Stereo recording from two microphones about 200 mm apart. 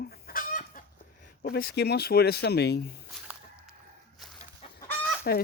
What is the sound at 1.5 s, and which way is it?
Speech, 50° left (ahead or behind).